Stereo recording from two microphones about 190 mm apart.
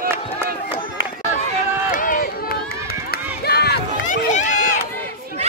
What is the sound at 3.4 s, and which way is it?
Crowd, 55° left (ahead or behind).